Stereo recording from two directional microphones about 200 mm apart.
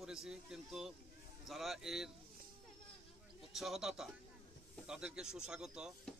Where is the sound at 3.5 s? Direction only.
Centre (ahead or behind).